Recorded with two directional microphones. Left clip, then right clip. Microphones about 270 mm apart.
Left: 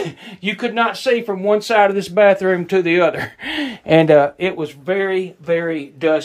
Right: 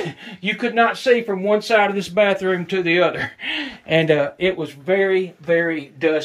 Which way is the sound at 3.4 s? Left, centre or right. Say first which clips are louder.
Left 2 dB; left.